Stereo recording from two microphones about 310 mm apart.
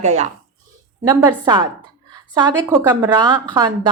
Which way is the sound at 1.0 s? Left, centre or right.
Centre.